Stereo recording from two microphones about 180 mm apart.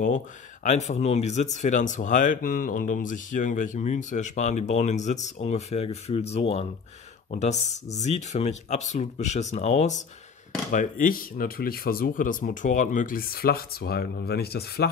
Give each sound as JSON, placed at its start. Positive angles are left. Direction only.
{"t": 0.7, "sound": "speech", "side_deg": 40}